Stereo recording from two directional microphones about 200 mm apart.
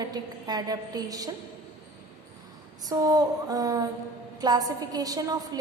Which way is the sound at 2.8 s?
20° right (ahead or behind).